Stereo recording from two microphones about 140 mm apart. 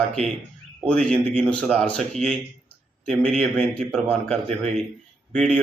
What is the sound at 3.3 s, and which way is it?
Speech, 5° left (ahead or behind).